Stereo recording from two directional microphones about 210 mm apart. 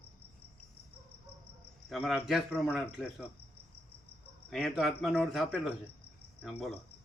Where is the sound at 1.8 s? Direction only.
Centre (ahead or behind).